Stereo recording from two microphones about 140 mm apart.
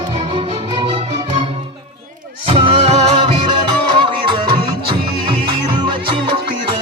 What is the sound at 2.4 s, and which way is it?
Music, 40° right (ahead or behind).